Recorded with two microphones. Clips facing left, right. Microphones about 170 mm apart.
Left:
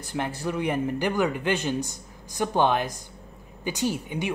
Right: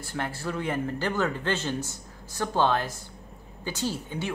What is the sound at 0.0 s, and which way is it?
A woman's voice, 15° left (ahead or behind).